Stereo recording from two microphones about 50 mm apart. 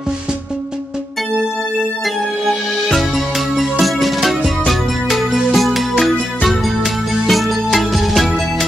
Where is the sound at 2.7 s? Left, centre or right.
Centre.